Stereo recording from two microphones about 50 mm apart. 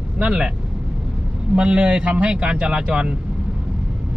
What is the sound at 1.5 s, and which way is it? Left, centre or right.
Speech, right.